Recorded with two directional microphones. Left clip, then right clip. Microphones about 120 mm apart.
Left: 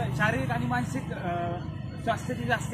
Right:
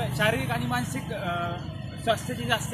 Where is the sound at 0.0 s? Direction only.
20° right (ahead or behind).